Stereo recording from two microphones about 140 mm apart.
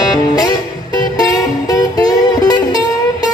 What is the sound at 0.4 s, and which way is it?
Music, 30° left (ahead or behind).